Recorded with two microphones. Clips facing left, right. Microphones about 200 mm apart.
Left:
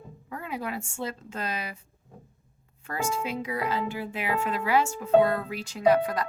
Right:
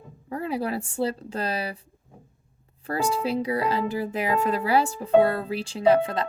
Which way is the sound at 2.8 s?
35° right (ahead or behind).